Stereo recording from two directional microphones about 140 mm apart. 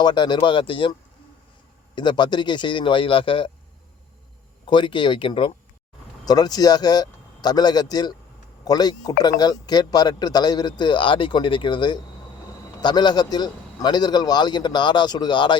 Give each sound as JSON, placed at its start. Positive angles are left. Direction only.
{"t": 0.0, "sound": "a man's voice", "side_deg": 35}
{"t": 2.0, "sound": "a man's voice", "side_deg": 30}
{"t": 4.6, "sound": "a man's voice", "side_deg": 35}